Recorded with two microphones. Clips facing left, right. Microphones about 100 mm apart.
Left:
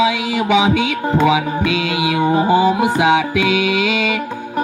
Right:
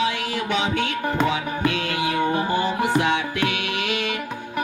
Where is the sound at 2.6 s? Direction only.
90° left.